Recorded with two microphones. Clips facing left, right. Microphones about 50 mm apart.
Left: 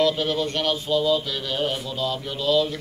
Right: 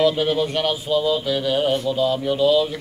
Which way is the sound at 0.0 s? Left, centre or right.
Centre.